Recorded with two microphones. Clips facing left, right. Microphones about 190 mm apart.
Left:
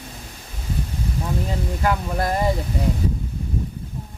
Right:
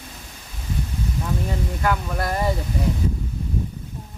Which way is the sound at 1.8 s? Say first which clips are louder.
Left 2 dB; 25° left (ahead or behind).